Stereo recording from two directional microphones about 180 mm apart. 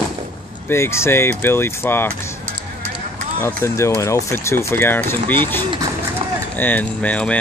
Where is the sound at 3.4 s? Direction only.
15° left (ahead or behind).